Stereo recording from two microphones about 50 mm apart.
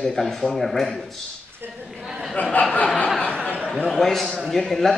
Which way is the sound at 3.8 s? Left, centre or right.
Centre.